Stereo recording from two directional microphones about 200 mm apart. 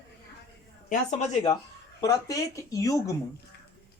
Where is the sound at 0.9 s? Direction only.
35° left (ahead or behind).